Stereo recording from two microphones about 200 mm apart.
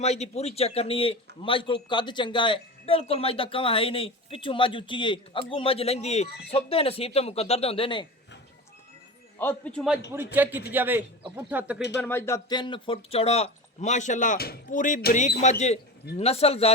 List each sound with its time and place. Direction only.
0.0 s speech: 35° left (ahead or behind)
9.4 s speech: 5° left (ahead or behind)
10.3 s speech: 10° right (ahead or behind)
11.9 s speech: 10° left (ahead or behind); by 16.7 s 30° left (ahead or behind)